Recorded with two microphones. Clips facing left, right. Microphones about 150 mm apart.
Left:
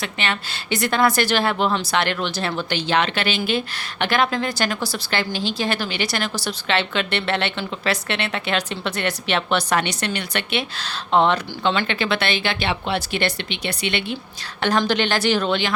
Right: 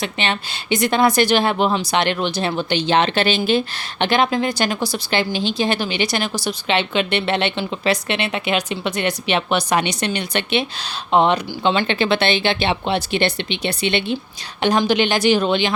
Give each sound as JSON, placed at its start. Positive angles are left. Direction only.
{"t": 0.0, "sound": "speech", "side_deg": -25}
{"t": 14.6, "sound": "a woman's voice", "side_deg": -15}